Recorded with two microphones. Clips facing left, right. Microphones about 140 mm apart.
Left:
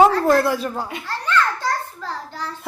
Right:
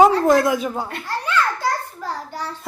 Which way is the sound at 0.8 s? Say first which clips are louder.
Right 1 dB; 5° left (ahead or behind).